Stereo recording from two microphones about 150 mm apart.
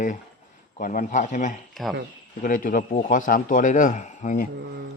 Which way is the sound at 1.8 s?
5° left (ahead or behind).